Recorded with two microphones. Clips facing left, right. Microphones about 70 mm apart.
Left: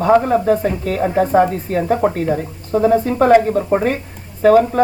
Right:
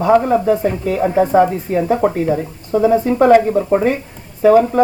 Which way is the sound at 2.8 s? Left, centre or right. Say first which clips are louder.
Right 1 dB; centre.